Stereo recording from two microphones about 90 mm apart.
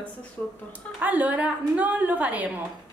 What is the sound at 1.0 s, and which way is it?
A woman's voice, 15° right (ahead or behind).